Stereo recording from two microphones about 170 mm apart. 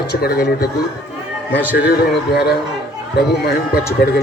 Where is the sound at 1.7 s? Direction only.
70° left (ahead or behind).